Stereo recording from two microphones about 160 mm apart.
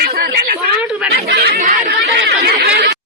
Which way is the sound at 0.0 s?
70° right (ahead or behind).